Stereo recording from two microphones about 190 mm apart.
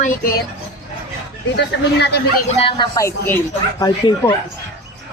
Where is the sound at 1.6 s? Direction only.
60° left (ahead or behind).